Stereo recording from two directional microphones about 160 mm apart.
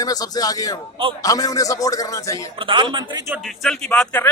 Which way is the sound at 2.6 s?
30° right (ahead or behind).